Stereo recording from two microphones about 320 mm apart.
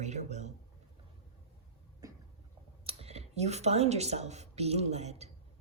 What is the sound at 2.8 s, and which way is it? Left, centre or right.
Speech, centre.